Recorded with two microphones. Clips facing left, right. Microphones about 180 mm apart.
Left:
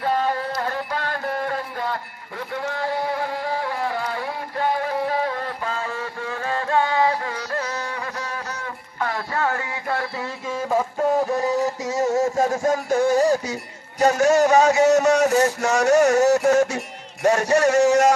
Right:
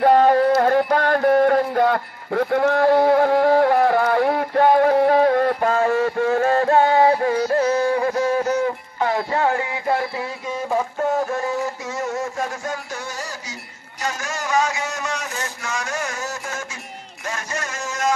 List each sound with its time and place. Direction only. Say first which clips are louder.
0.0 s music: right 9 dB; 55° right (ahead or behind); by 10.0 s 20° right (ahead or behind)
10.7 s a sound: left 1 dB; 15° left (ahead or behind)
11.6 s music: left 4 dB; 40° left (ahead or behind)
14.5 s speech: left 8 dB; 40° left (ahead or behind)
16.1 s speech: left 14 dB; 70° left (ahead or behind)